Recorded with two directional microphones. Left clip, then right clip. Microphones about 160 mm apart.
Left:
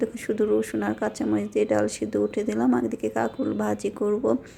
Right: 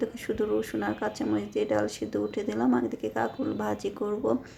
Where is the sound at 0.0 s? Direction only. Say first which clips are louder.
Left 4 dB; 25° left (ahead or behind).